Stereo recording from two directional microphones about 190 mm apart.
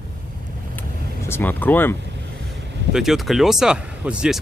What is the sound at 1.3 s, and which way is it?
Speech, 10° left (ahead or behind).